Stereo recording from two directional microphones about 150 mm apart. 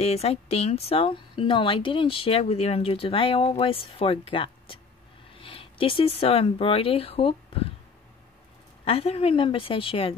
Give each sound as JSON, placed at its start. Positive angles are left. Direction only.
{"t": 0.0, "sound": "speech", "side_deg": 45}
{"t": 8.8, "sound": "speech", "side_deg": 40}